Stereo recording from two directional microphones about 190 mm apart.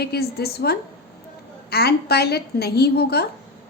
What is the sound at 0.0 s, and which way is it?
A woman's voice, 55° left (ahead or behind).